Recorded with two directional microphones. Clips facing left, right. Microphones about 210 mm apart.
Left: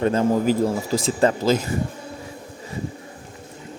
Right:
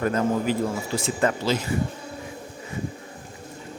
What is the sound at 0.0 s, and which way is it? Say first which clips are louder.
A man's voice: left 4 dB; 30° left (ahead or behind).